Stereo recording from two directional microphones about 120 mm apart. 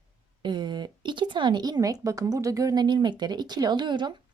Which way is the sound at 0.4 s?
40° right (ahead or behind).